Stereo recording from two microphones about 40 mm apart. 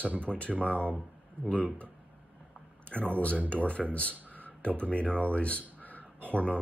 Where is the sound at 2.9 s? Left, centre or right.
Left.